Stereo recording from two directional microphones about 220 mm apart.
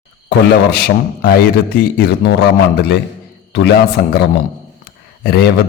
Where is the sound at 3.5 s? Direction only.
50° left (ahead or behind).